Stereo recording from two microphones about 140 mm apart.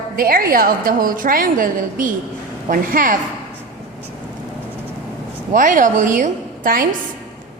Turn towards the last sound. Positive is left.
turn(degrees=-75)  # may be behind; listen again after turning